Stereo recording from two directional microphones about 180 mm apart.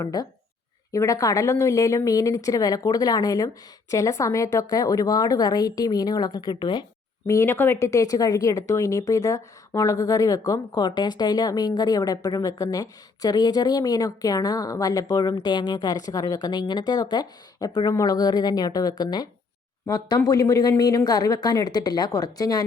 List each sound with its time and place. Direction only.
0.0 s speech: 20° left (ahead or behind)